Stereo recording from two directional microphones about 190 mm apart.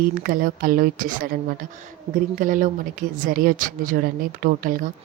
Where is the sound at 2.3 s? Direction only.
45° right (ahead or behind).